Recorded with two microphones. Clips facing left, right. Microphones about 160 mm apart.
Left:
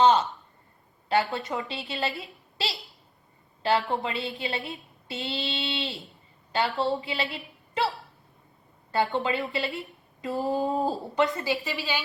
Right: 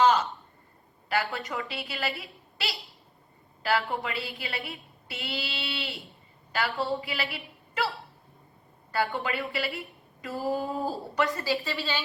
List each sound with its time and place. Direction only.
0.0 s a sound: 25° left (ahead or behind)
1.1 s a woman's voice: 25° left (ahead or behind)
3.6 s a woman's voice: 25° left (ahead or behind)